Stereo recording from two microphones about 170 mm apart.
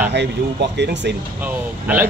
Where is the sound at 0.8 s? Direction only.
90° right.